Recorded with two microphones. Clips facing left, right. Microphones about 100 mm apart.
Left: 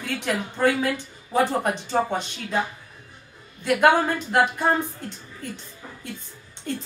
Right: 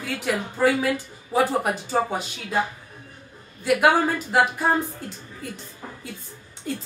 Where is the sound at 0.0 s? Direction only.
Centre (ahead or behind).